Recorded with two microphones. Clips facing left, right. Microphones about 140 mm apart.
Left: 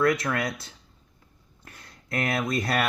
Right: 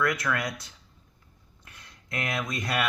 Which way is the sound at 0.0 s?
25° left (ahead or behind).